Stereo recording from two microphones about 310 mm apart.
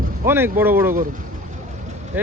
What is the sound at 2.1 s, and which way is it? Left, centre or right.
Speech, centre.